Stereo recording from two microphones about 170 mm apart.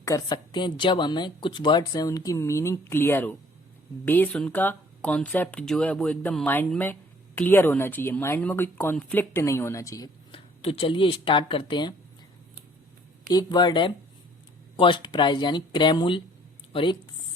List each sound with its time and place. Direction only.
0.0 s speech: 20° left (ahead or behind)
10.3 s speech: 35° left (ahead or behind)
13.2 s speech: 25° left (ahead or behind)